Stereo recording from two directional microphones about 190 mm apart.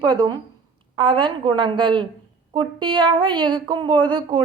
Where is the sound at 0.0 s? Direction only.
25° right (ahead or behind).